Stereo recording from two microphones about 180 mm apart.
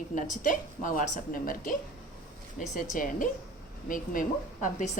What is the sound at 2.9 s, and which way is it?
A woman's voice, 50° left (ahead or behind).